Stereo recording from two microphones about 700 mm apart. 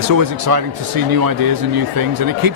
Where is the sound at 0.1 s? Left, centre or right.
Right.